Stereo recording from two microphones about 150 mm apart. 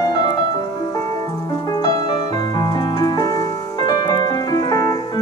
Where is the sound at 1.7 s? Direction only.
25° left (ahead or behind).